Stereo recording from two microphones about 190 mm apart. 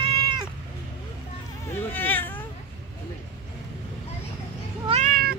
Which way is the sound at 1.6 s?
10° left (ahead or behind).